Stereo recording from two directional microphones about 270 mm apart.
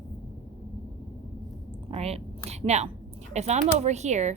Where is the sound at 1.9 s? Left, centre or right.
Right.